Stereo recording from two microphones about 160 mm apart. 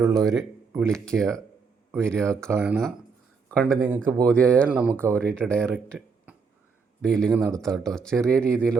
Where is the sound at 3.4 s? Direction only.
5° left (ahead or behind).